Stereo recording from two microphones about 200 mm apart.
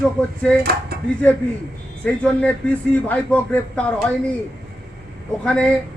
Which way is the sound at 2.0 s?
5° left (ahead or behind).